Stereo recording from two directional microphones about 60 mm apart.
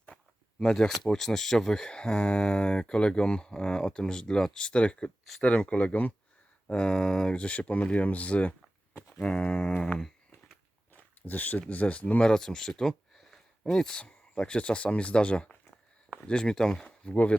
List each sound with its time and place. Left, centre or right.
0.6 s speech: centre; by 6.1 s left
6.7 s speech: centre
10.9 s biting: left
11.7 s speech: left